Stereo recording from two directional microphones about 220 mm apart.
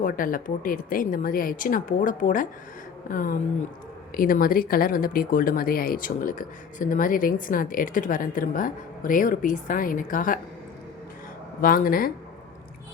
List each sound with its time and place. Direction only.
0.0 s speech: 40° left (ahead or behind)
11.6 s speech: 40° left (ahead or behind)